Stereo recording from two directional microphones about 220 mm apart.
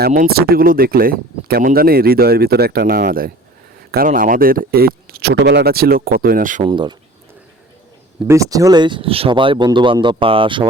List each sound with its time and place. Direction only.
0.0 s speech: 40° right (ahead or behind)
6.7 s speech: 20° right (ahead or behind)
8.3 s speech: 15° right (ahead or behind)